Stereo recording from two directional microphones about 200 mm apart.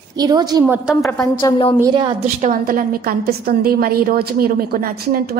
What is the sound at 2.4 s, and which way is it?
A woman's voice, 45° right (ahead or behind).